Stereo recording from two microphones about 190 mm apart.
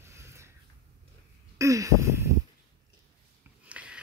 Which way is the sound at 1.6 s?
15° right (ahead or behind).